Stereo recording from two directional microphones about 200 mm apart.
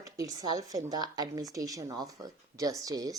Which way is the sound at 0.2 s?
20° right (ahead or behind).